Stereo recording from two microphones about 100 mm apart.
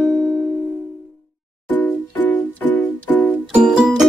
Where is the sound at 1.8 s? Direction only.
15° left (ahead or behind).